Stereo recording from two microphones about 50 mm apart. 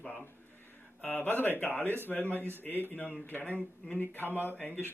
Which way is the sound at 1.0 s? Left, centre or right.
Left.